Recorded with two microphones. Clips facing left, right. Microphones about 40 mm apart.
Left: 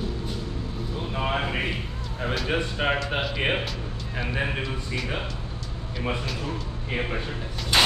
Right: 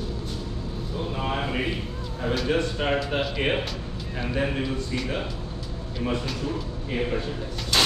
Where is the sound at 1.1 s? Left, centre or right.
Centre.